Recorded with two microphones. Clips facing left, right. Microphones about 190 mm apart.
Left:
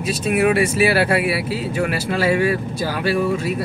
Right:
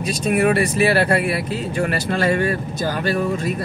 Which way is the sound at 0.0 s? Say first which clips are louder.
Even; 5° left (ahead or behind).